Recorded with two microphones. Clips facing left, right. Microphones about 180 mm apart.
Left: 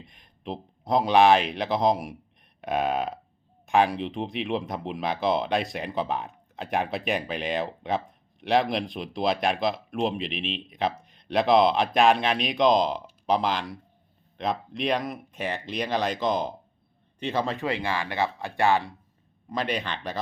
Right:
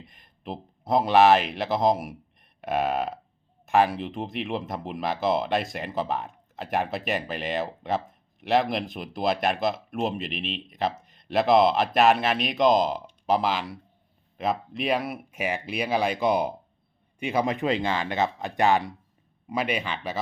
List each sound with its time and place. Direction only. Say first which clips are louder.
0.0 s speech: left 2 dB; centre (ahead or behind)